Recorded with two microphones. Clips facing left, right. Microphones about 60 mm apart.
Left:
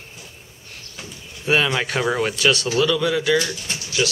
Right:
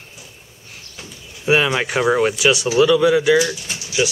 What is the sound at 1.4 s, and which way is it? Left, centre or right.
Speech, centre.